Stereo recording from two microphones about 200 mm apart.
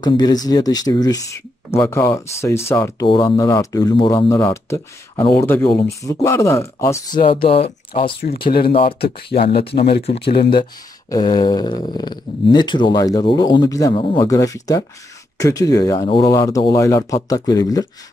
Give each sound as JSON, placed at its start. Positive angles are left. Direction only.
{"t": 0.0, "sound": "speech", "side_deg": 20}
{"t": 7.2, "sound": "speech", "side_deg": 25}
{"t": 8.2, "sound": "speech", "side_deg": 50}
{"t": 10.5, "sound": "speech", "side_deg": 20}